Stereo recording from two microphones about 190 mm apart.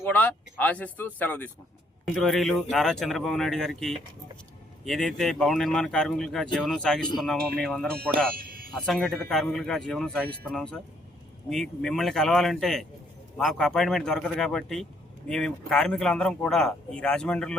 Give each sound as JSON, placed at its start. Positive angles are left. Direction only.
{"t": 0.0, "sound": "a man's voice", "side_deg": 10}
{"t": 8.4, "sound": "a sound", "side_deg": -50}
{"t": 8.9, "sound": "a man's voice", "side_deg": 0}